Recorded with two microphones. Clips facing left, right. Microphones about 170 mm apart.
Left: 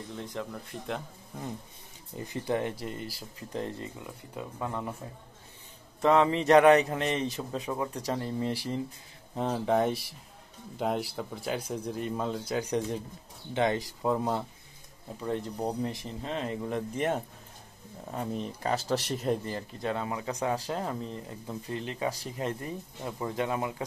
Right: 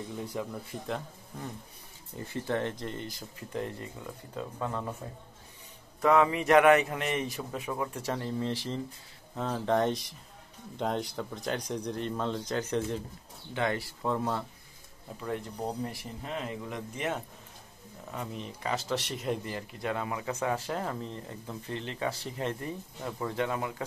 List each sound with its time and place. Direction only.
0.1 s speech: 10° right (ahead or behind)
2.1 s speech: 15° left (ahead or behind)
3.2 s speech: 30° left (ahead or behind)
4.0 s speech: 15° left (ahead or behind)
5.9 s speech: 25° left (ahead or behind)
8.5 s speech: 10° left (ahead or behind)
9.7 s speech: 5° left (ahead or behind); by 19.6 s 35° left (ahead or behind)
19.8 s speech: 25° left (ahead or behind)
20.3 s speech: 15° left (ahead or behind)